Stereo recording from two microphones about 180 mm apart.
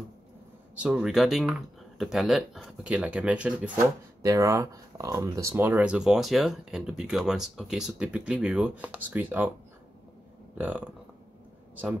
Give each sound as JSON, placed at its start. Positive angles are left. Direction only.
{"t": 0.7, "sound": "speech", "side_deg": -5}
{"t": 4.2, "sound": "speech", "side_deg": -20}
{"t": 10.6, "sound": "speech", "side_deg": -10}